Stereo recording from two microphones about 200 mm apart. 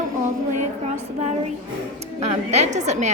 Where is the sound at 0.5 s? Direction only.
35° right (ahead or behind).